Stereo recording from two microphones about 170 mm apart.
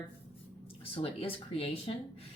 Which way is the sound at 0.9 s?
35° left (ahead or behind).